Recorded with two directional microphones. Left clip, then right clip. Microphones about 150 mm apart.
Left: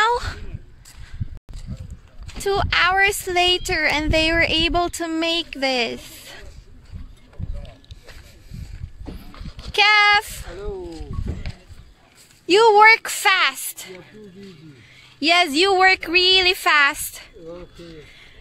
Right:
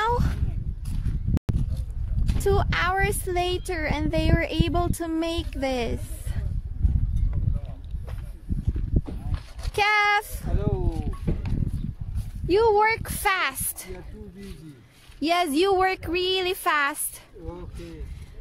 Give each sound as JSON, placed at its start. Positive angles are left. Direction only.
{"t": 0.0, "sound": "a sound", "side_deg": 5}
{"t": 2.4, "sound": "speech", "side_deg": 5}
{"t": 9.7, "sound": "a sound", "side_deg": 0}
{"t": 12.4, "sound": "speech", "side_deg": 20}
{"t": 13.2, "sound": "speech", "side_deg": 5}
{"t": 15.1, "sound": "speech", "side_deg": 0}